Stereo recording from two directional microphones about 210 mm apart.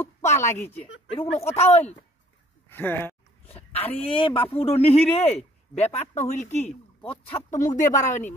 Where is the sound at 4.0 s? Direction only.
25° left (ahead or behind).